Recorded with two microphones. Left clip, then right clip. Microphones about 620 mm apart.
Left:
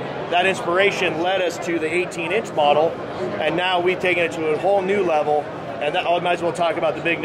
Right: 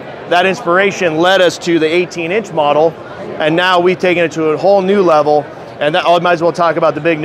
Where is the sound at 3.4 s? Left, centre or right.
Right.